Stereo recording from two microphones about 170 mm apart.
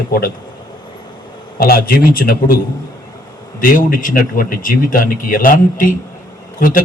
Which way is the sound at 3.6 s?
55° left (ahead or behind).